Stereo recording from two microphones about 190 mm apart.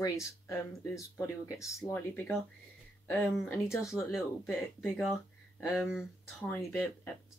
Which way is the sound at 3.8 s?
Centre (ahead or behind).